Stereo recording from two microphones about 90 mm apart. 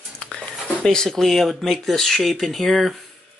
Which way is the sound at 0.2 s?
10° left (ahead or behind).